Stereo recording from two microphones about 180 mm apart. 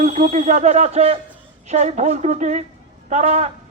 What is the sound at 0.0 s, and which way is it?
A man's voice, 40° right (ahead or behind).